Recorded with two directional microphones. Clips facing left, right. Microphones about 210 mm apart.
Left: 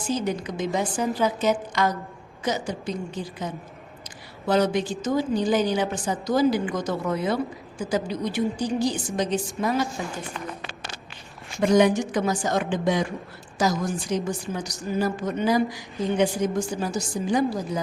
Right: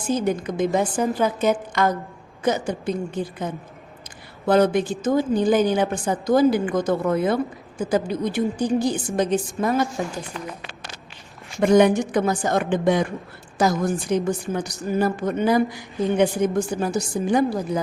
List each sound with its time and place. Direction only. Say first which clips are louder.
0.1 s a woman's voice: right 4 dB; 55° right (ahead or behind)
11.6 s a woman's voice: right 3 dB; 55° right (ahead or behind)